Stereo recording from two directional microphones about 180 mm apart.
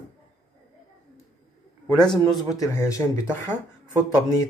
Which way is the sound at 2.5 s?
20° left (ahead or behind).